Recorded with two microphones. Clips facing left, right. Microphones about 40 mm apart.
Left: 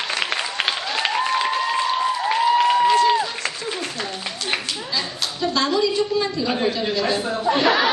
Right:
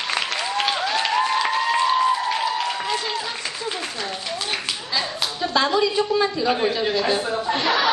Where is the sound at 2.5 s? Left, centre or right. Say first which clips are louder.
Left 8 dB; centre.